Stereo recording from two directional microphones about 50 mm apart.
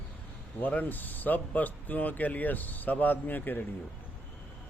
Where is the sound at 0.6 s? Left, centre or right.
Left.